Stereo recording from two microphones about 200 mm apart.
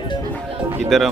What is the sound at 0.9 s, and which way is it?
Speech, centre (ahead or behind).